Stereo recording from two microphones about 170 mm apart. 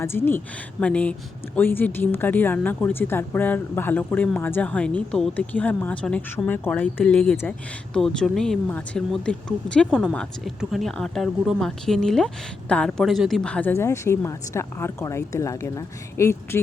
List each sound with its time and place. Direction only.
0.0 s a woman's voice: 15° left (ahead or behind)